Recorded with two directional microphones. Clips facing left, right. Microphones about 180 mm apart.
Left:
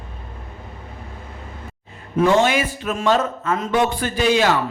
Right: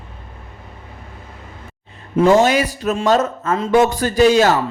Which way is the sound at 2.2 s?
40° right (ahead or behind).